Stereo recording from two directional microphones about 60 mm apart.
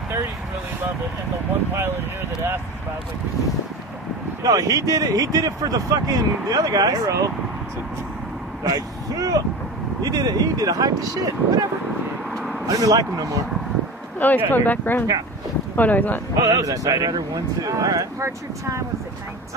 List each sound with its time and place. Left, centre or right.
4.4 s speech: right
8.6 s speech: right
12.6 s speech: right
14.2 s speech: left
16.3 s speech: right
18.2 s speech: right